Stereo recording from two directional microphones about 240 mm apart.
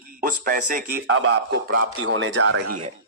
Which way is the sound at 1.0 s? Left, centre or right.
Right.